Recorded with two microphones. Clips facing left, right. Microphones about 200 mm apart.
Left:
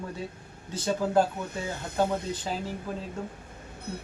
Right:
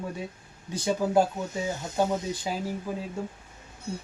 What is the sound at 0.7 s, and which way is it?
Speech, 15° right (ahead or behind).